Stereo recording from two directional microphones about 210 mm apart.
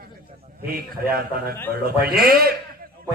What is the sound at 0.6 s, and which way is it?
A man's voice, 45° right (ahead or behind).